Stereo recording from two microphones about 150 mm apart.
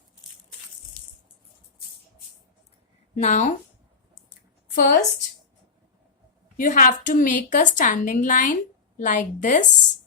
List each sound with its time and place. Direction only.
3.2 s a woman's voice: 50° left (ahead or behind)
4.7 s a woman's voice: 75° left (ahead or behind)
6.6 s a woman's voice: 65° left (ahead or behind)